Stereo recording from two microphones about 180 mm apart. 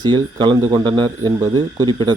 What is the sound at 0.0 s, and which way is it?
Speech, 25° right (ahead or behind).